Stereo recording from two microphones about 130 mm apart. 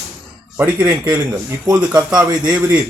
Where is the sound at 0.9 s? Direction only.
25° right (ahead or behind).